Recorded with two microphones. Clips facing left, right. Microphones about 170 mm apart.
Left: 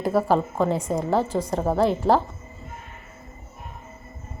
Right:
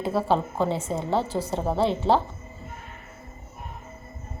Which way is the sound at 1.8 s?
30° right (ahead or behind).